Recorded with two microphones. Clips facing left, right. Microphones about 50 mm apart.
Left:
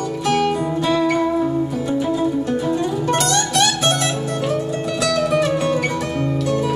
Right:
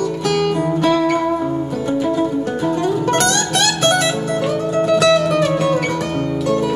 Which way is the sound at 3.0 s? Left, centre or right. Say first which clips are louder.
Right 2 dB; right.